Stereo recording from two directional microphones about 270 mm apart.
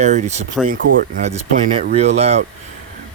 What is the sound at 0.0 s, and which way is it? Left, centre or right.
Speech, right.